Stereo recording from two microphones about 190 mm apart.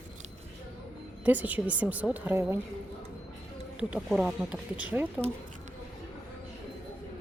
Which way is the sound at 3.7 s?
5° right (ahead or behind).